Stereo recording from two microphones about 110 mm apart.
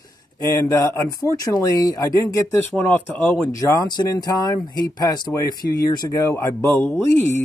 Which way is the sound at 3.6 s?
35° left (ahead or behind).